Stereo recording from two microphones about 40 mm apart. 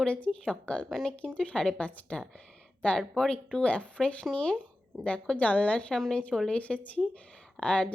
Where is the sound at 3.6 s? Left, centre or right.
Left.